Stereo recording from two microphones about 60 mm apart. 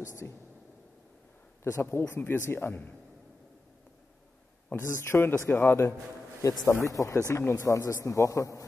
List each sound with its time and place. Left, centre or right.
0.0 s a man's voice: left
1.6 s speech: left
4.6 s speech: left
6.4 s a man's voice: left
7.5 s a man's voice: left